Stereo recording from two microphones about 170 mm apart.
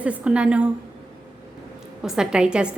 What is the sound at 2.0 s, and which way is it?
Speech, 5° right (ahead or behind).